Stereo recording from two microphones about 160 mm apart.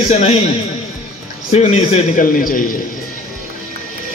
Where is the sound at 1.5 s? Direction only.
40° left (ahead or behind).